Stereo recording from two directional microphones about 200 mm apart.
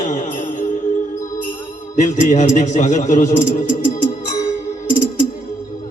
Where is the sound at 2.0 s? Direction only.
40° left (ahead or behind).